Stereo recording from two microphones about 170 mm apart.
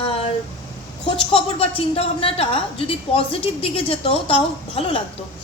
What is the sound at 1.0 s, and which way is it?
A woman's voice, 30° left (ahead or behind).